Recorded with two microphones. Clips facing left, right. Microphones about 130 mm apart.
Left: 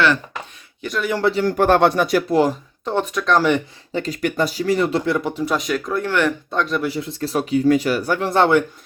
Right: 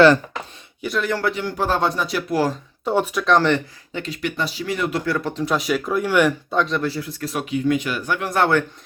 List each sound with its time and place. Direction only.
0.8 s speech: centre (ahead or behind)
1.2 s speech: 35° left (ahead or behind)
1.5 s speech: 60° left (ahead or behind)
2.3 s speech: 20° left (ahead or behind)
2.8 s speech: 10° right (ahead or behind)
3.9 s speech: 40° left (ahead or behind)
5.1 s speech: 10° left (ahead or behind)
6.9 s speech: 25° left (ahead or behind)